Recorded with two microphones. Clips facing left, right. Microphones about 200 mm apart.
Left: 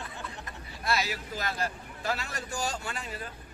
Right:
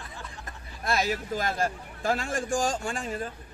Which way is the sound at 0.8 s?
45° right (ahead or behind).